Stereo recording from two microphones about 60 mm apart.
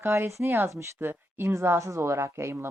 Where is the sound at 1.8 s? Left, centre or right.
Right.